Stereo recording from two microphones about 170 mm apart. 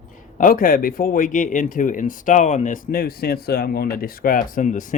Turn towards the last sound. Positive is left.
turn(degrees=50)  # may be behind; listen again after turning